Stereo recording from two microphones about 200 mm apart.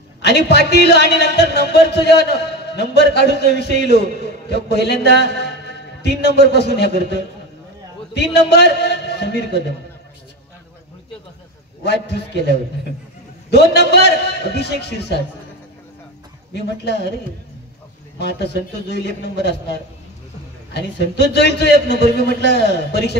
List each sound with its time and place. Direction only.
0.2 s a man's voice: 55° left (ahead or behind)
8.1 s a man's voice: 55° left (ahead or behind)
11.8 s a man's voice: 55° left (ahead or behind)
16.5 s a man's voice: 55° left (ahead or behind)
18.2 s a man's voice: 55° left (ahead or behind)
20.7 s a man's voice: 55° left (ahead or behind)